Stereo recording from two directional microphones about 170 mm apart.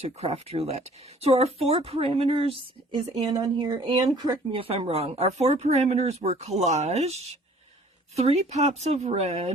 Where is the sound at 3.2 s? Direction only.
20° right (ahead or behind).